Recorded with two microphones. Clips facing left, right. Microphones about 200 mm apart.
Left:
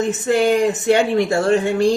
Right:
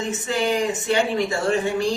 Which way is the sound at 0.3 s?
65° left (ahead or behind).